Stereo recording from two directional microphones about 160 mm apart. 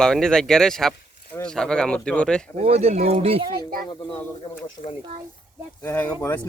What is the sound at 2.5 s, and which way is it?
Speech, 40° right (ahead or behind).